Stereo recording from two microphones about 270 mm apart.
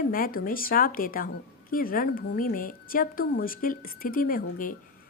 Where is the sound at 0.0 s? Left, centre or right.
Left.